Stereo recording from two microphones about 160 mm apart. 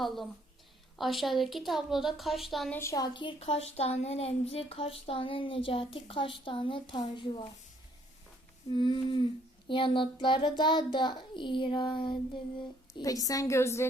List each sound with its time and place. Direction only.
0.0 s a woman's voice: centre (ahead or behind)
2.7 s a woman's voice: 20° left (ahead or behind)
3.2 s speech: 35° left (ahead or behind)
8.7 s a woman's voice: 30° left (ahead or behind)